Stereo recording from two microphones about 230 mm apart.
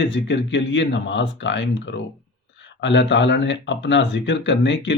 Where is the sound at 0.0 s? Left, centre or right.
Left.